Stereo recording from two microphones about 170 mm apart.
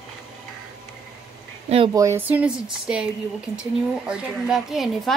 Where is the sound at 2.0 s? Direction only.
15° right (ahead or behind).